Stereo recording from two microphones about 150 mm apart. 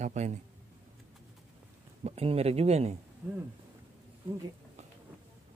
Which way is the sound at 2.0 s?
40° right (ahead or behind).